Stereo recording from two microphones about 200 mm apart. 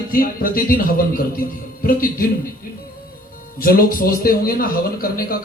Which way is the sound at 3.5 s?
45° left (ahead or behind).